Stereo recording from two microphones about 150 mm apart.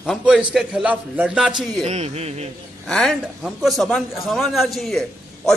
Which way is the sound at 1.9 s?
45° right (ahead or behind).